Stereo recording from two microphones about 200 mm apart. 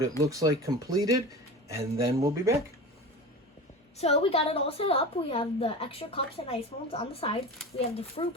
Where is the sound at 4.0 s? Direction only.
30° left (ahead or behind).